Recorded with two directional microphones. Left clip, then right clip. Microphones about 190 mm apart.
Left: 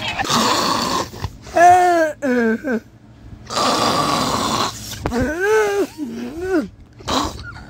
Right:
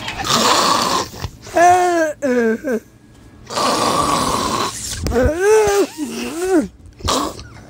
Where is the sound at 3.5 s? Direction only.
10° right (ahead or behind).